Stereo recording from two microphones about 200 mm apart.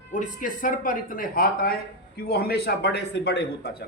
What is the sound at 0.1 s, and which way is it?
Speech, 40° left (ahead or behind).